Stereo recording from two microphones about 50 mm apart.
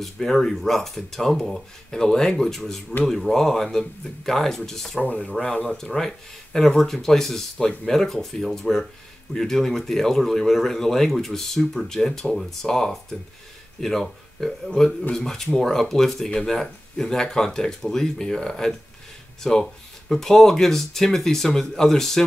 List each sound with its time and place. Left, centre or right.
0.0 s speech: centre
5.4 s speech: left
5.7 s speech: centre